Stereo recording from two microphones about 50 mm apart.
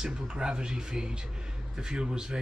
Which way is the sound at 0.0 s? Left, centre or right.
Centre.